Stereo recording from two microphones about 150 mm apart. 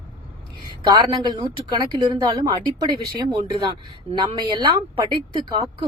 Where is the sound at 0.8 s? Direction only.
30° right (ahead or behind).